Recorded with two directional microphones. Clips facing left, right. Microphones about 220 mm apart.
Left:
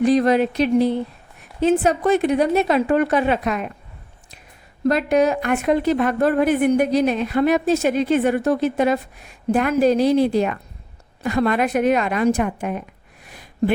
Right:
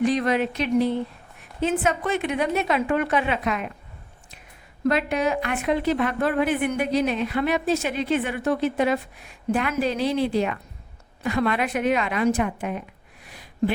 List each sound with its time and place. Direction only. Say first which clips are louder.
0.0 s a woman's voice: left 6 dB; 35° left (ahead or behind)
4.9 s a woman's voice: left 5 dB; 40° left (ahead or behind)
13.2 s a sound: left 4 dB; 50° left (ahead or behind)